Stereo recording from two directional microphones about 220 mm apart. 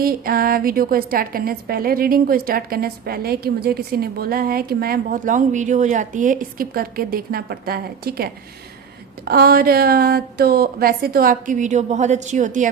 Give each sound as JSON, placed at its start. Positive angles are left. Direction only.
{"t": 0.0, "sound": "a woman's voice", "side_deg": -40}